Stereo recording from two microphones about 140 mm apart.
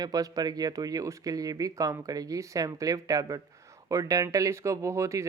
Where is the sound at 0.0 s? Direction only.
25° right (ahead or behind).